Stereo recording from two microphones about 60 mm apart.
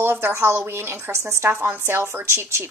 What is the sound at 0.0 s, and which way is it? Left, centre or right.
A woman's voice, right.